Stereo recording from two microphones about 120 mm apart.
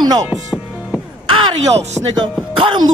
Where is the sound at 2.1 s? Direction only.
45° right (ahead or behind).